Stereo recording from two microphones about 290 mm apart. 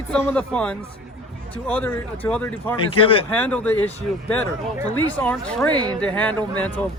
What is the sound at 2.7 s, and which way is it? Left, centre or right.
Speech, centre.